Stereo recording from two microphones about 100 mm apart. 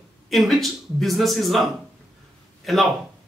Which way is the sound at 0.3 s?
Centre (ahead or behind).